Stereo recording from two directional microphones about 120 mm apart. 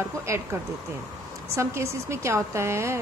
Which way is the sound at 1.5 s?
25° right (ahead or behind).